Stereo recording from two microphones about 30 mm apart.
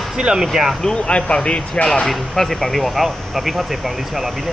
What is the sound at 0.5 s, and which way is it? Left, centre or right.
Speech, centre.